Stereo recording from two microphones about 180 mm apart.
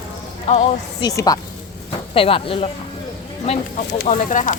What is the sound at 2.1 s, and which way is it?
Speech, 30° left (ahead or behind).